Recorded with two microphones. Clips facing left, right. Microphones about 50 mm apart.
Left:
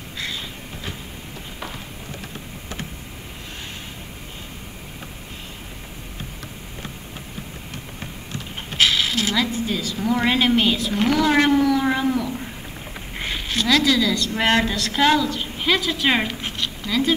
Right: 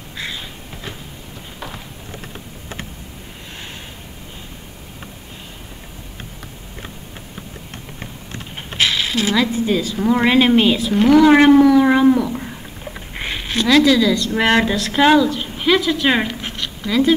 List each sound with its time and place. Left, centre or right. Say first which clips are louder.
8.5 s speech: even; centre
10.9 s speech: right 8 dB; centre
11.2 s speech: right 6 dB; centre
12.2 s a sound: right 5 dB; centre
13.1 s a woman's voice: right 3 dB; centre